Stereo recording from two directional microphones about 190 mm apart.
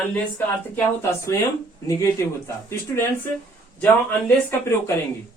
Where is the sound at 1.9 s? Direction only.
15° left (ahead or behind).